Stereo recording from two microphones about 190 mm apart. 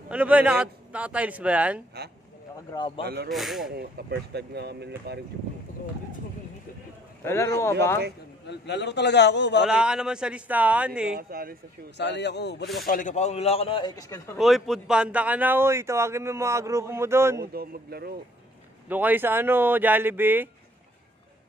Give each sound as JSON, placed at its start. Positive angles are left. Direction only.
{"t": 0.1, "sound": "speech", "side_deg": -5}
{"t": 3.0, "sound": "speech", "side_deg": -60}
{"t": 3.3, "sound": "speech", "side_deg": 0}
{"t": 3.7, "sound": "speech", "side_deg": -60}
{"t": 7.2, "sound": "speech", "side_deg": 15}
{"t": 8.5, "sound": "a man's voice", "side_deg": 60}
{"t": 9.6, "sound": "speech", "side_deg": -5}
{"t": 11.1, "sound": "speech", "side_deg": -50}
{"t": 12.0, "sound": "a man's voice", "side_deg": 65}
{"t": 12.8, "sound": "a man's voice", "side_deg": 45}
{"t": 14.4, "sound": "speech", "side_deg": 0}
{"t": 17.5, "sound": "speech", "side_deg": -55}
{"t": 18.9, "sound": "speech", "side_deg": -10}